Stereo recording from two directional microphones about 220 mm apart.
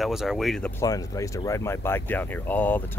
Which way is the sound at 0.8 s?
15° left (ahead or behind).